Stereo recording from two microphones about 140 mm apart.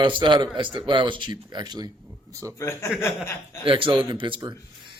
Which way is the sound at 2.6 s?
20° left (ahead or behind).